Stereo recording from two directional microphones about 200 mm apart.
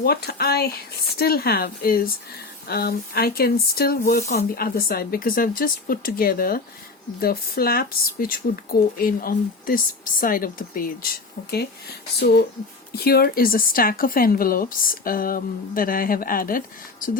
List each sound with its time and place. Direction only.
0.0 s speech: 50° left (ahead or behind)
12.9 s speech: 50° left (ahead or behind)